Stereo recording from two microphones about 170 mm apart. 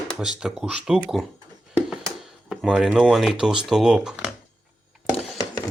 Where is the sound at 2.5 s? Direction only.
5° right (ahead or behind).